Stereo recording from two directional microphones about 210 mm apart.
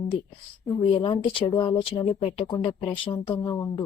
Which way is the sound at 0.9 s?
25° left (ahead or behind).